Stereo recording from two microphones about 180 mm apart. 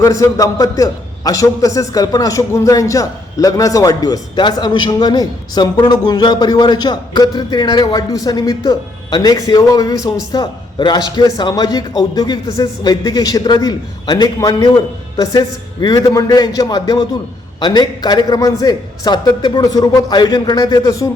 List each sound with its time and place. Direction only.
0.0 s a man's voice: 20° left (ahead or behind)